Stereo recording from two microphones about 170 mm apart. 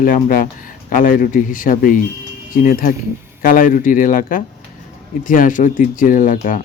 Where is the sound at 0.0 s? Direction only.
55° left (ahead or behind).